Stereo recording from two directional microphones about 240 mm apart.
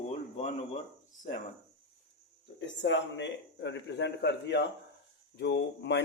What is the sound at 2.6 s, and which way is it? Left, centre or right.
Speech, left.